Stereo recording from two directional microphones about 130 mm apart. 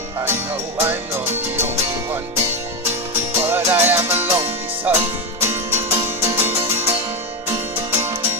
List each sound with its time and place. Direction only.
0.2 s music: 15° right (ahead or behind)